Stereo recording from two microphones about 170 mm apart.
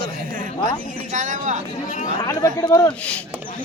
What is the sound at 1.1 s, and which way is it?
Speech, 45° right (ahead or behind).